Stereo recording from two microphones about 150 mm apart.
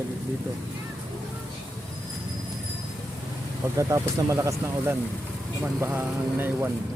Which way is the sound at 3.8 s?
20° right (ahead or behind).